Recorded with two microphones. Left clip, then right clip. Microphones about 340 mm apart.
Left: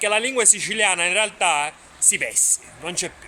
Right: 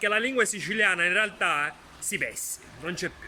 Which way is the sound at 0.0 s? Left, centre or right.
Centre.